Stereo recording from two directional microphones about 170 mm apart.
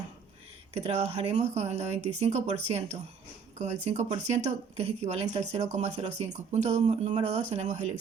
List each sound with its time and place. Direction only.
0.7 s speech: 40° right (ahead or behind)